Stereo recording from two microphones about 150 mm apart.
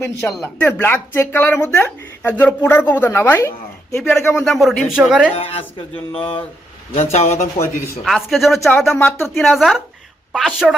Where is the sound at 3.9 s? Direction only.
5° left (ahead or behind).